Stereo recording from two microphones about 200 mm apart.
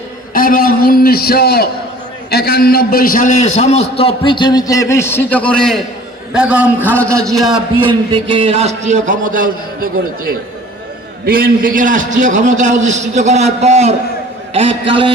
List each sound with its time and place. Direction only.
0.3 s a man's voice: 45° left (ahead or behind); by 7.5 s centre (ahead or behind)
7.5 s a man's voice: 25° right (ahead or behind); by 9.9 s 45° right (ahead or behind)
11.3 s a man's voice: 45° right (ahead or behind); by 15.1 s 25° right (ahead or behind)